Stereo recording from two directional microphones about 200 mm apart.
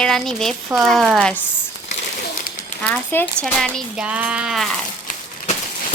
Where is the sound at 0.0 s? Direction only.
Centre (ahead or behind).